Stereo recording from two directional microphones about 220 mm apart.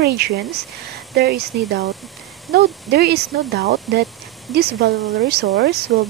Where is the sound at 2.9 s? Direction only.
45° right (ahead or behind).